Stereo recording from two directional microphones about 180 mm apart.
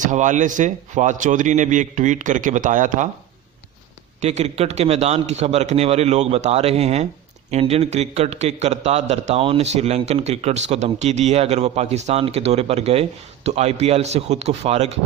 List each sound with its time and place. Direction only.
0.0 s a man's voice: 45° right (ahead or behind)
4.2 s a man's voice: 40° right (ahead or behind)